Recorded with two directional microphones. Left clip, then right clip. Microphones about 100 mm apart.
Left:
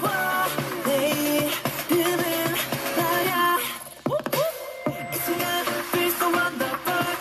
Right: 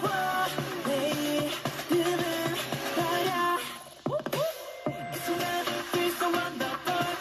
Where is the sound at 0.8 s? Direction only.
15° left (ahead or behind).